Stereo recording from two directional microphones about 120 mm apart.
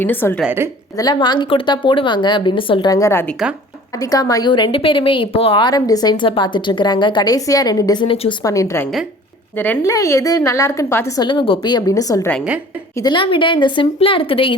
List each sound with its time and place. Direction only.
0.0 s a woman's voice: 15° left (ahead or behind)
0.4 s a woman's voice: 20° right (ahead or behind)
0.9 s a woman's voice: 35° left (ahead or behind)
2.9 s a woman's voice: 25° left (ahead or behind)
8.0 s speech: 45° left (ahead or behind)
8.4 s a woman's voice: 25° left (ahead or behind)
11.2 s a woman's voice: 45° left (ahead or behind)
13.0 s speech: 40° left (ahead or behind)